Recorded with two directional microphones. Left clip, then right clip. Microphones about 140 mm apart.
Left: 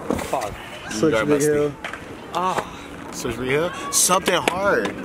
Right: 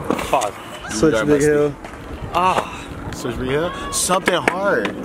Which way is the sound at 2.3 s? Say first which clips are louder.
Right 6 dB; 35° right (ahead or behind).